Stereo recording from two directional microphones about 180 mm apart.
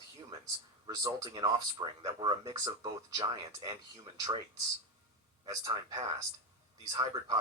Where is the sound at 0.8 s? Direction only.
20° right (ahead or behind).